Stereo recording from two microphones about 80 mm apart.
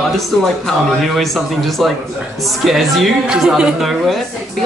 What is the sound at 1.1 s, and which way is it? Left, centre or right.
A woman's voice, centre.